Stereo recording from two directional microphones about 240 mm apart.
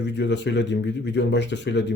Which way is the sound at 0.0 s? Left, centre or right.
Left.